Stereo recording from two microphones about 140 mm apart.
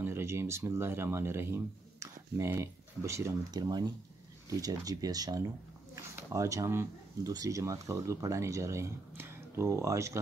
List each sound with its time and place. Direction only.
0.0 s speech: 20° right (ahead or behind)